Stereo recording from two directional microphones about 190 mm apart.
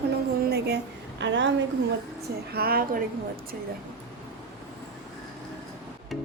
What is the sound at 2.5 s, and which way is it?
Speech, 55° right (ahead or behind).